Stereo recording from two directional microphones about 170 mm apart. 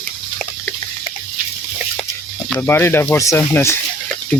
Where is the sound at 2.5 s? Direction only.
15° left (ahead or behind).